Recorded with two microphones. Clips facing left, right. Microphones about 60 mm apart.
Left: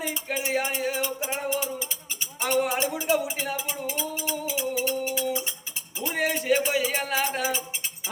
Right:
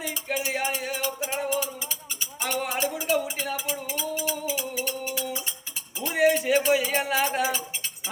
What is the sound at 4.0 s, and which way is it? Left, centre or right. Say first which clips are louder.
Music: right 1 dB; centre.